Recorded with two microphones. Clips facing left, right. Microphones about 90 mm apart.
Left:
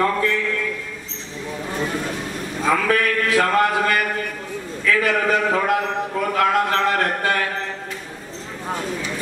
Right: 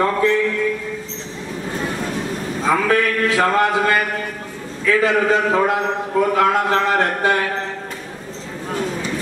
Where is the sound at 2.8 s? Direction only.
25° right (ahead or behind).